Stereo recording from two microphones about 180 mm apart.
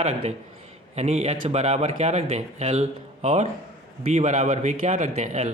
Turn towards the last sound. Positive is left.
turn(degrees=-40)  # may be behind; listen again after turning